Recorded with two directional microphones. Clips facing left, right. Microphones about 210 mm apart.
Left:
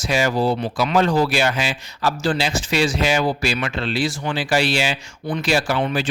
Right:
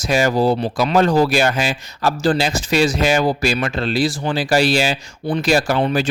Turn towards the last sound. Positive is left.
turn(degrees=-40)  # may be behind; listen again after turning